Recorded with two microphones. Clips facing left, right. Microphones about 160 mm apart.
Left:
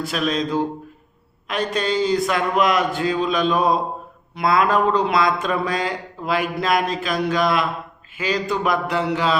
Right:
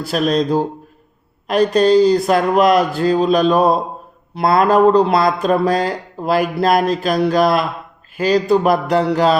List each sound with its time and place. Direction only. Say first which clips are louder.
0.0 s speech: right 6 dB; 35° right (ahead or behind)